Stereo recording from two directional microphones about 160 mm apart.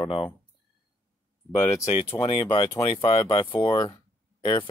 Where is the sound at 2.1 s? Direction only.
35° left (ahead or behind).